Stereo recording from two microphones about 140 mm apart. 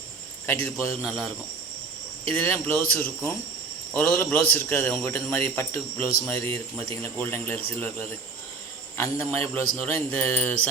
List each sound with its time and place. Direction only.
0.4 s a man's voice: 15° left (ahead or behind)
1.0 s a man's voice: centre (ahead or behind)
2.3 s a man's voice: 15° left (ahead or behind)
3.9 s a man's voice: 15° left (ahead or behind)